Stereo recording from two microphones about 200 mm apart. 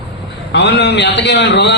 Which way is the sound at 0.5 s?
55° left (ahead or behind).